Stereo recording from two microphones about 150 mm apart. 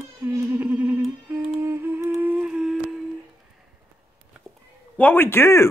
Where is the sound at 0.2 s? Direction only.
15° right (ahead or behind).